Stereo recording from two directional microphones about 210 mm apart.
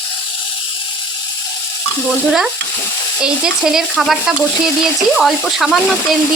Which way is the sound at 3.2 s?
5° right (ahead or behind).